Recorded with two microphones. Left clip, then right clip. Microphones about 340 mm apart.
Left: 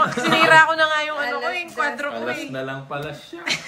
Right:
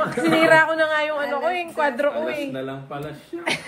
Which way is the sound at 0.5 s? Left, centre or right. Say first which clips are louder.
Left 4 dB; centre.